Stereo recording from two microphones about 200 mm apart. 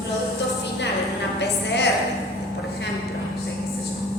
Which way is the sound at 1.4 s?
60° left (ahead or behind).